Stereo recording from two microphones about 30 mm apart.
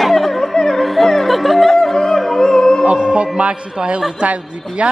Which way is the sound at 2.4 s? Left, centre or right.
Left.